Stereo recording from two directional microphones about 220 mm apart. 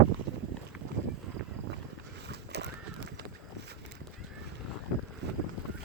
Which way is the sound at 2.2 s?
50° right (ahead or behind).